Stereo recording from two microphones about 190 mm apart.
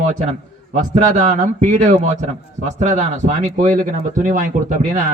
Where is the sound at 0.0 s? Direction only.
40° right (ahead or behind).